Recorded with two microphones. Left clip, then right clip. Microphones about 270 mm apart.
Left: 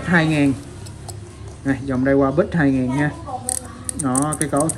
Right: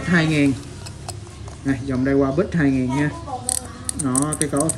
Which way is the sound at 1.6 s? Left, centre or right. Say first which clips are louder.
Left 2 dB; centre.